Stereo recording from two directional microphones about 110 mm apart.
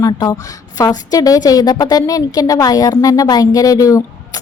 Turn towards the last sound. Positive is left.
turn(degrees=30)  # may be behind; listen again after turning